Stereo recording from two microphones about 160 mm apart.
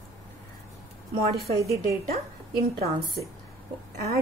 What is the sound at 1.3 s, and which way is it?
Speech, 75° right (ahead or behind).